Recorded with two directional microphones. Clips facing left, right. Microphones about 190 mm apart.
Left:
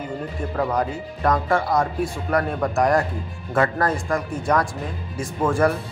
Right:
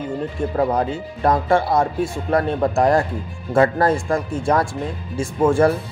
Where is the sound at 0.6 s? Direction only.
30° right (ahead or behind).